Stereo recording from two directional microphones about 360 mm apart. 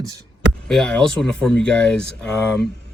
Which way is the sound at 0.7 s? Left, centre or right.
Centre.